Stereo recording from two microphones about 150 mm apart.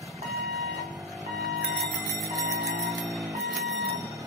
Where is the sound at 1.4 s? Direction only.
Centre (ahead or behind).